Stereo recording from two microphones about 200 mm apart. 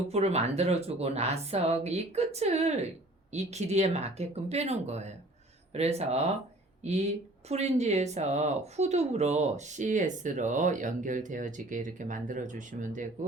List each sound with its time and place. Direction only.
0.1 s speech: 30° right (ahead or behind)